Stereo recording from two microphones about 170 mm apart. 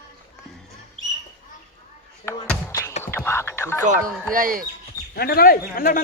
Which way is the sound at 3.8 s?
50° right (ahead or behind).